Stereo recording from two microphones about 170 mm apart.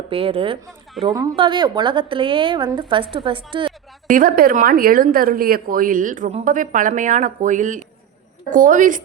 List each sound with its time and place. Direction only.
0.1 s a woman's voice: 35° right (ahead or behind)
4.1 s a woman's voice: 55° right (ahead or behind)